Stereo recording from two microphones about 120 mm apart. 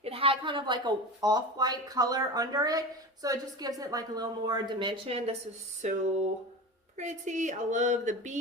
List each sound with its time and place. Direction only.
0.0 s speech: 50° right (ahead or behind)
5.1 s speech: 55° right (ahead or behind)
5.8 s speech: 70° right (ahead or behind)
6.9 s a woman's voice: 80° right